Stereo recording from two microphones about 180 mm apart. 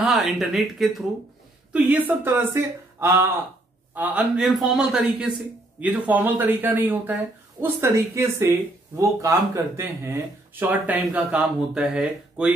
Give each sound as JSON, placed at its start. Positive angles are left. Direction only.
{"t": 0.0, "sound": "a man's voice", "side_deg": 0}